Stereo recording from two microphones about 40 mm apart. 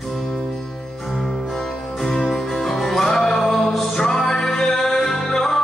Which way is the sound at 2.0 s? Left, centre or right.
Centre.